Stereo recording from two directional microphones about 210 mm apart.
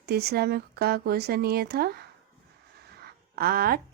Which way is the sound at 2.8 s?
50° right (ahead or behind).